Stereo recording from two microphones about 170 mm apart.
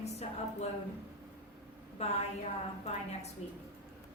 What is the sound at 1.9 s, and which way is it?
Speech, 40° left (ahead or behind).